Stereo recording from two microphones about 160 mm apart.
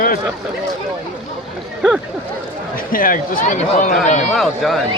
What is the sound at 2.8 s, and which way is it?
A man's voice, 60° left (ahead or behind).